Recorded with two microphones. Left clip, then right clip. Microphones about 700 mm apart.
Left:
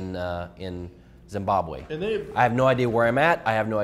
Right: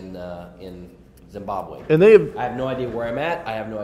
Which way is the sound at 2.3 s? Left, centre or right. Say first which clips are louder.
Left 5 dB; left.